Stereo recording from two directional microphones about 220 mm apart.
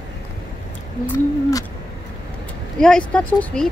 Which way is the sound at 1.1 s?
15° left (ahead or behind).